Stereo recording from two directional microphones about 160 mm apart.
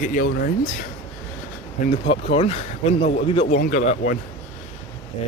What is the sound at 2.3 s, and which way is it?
Speech, 40° left (ahead or behind).